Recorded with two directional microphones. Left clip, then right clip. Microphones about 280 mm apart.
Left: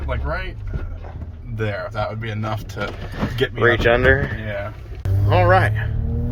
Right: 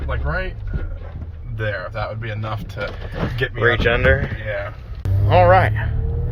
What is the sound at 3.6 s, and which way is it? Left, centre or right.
Speech, centre.